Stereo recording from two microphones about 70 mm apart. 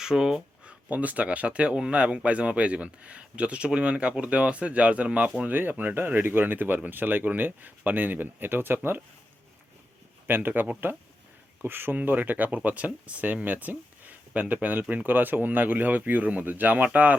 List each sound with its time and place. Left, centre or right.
0.0 s a sound: centre
0.9 s speech: right
10.2 s speech: right